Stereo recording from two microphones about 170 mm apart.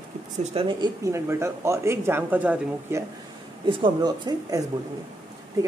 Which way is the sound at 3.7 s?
25° right (ahead or behind).